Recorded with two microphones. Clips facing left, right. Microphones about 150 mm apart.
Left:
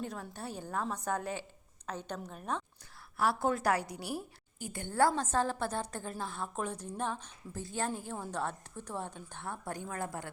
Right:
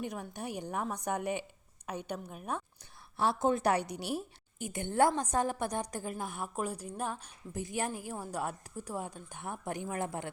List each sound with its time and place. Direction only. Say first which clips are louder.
0.0 s a woman's voice: right 2 dB; 15° right (ahead or behind)
3.2 s a woman's voice: right 1 dB; 20° right (ahead or behind)